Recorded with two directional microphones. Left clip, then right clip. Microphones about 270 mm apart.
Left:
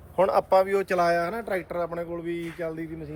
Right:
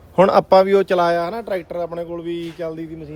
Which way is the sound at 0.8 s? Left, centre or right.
Centre.